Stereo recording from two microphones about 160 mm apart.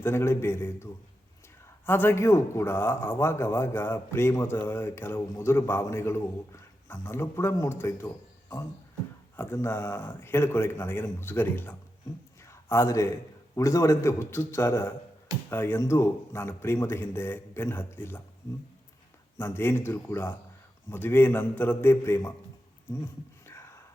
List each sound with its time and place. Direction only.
0.0 s a man's voice: 15° left (ahead or behind)
1.9 s a man's voice: 15° left (ahead or behind)
19.4 s a man's voice: 15° left (ahead or behind)
23.5 s a sound: 15° left (ahead or behind)